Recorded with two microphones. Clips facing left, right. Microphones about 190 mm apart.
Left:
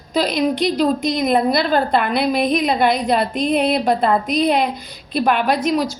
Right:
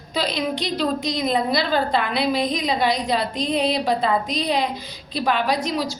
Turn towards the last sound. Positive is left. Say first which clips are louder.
# left 5 dB
turn(degrees=55)  # may be behind; listen again after turning